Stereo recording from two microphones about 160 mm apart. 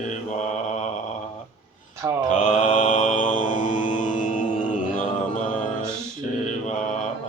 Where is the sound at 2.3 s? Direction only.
45° left (ahead or behind).